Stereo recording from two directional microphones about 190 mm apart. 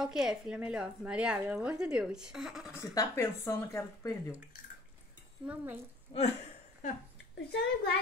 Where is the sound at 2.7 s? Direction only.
15° left (ahead or behind).